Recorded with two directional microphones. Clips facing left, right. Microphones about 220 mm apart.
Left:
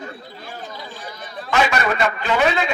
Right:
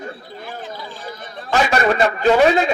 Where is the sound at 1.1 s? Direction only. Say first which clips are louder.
Right 3 dB; 35° right (ahead or behind).